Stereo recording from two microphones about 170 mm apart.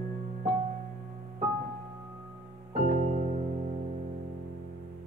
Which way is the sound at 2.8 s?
45° right (ahead or behind).